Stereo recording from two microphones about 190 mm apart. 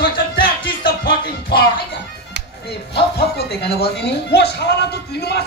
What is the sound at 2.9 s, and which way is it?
Speech, 60° left (ahead or behind).